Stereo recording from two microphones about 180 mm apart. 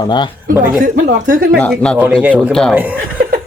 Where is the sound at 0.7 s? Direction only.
45° right (ahead or behind).